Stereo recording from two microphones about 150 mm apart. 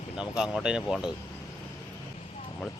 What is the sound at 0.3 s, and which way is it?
Speech, 5° right (ahead or behind).